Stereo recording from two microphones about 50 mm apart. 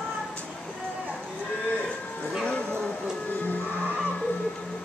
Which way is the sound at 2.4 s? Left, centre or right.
Left.